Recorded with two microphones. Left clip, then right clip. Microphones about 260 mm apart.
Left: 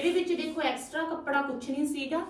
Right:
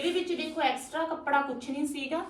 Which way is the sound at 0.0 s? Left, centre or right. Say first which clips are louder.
Left 2 dB; centre.